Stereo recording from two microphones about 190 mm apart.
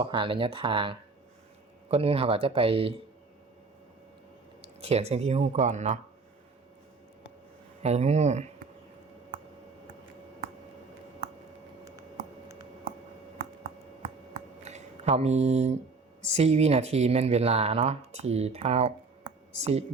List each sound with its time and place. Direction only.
0.0 s speech: 25° right (ahead or behind)
4.6 s speech: 35° right (ahead or behind)
7.8 s speech: 35° right (ahead or behind)
14.6 s a sound: 35° right (ahead or behind)
16.2 s speech: 35° right (ahead or behind)